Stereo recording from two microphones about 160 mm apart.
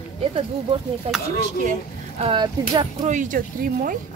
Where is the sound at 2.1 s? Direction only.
35° right (ahead or behind).